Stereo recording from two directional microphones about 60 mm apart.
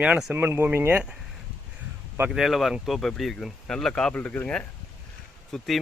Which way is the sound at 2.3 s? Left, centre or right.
Centre.